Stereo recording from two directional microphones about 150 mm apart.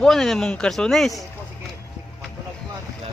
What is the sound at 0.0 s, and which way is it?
Speech, 5° left (ahead or behind).